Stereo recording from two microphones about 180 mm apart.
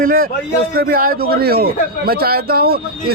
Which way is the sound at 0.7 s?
55° right (ahead or behind).